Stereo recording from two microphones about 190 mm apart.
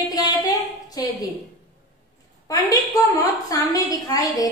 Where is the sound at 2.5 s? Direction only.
20° left (ahead or behind).